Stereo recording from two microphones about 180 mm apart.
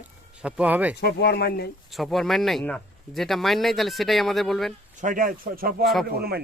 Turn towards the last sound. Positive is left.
turn(degrees=-60)  # may be behind; listen again after turning